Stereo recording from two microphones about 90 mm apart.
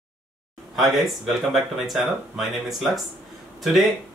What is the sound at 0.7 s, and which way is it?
Speech, centre (ahead or behind).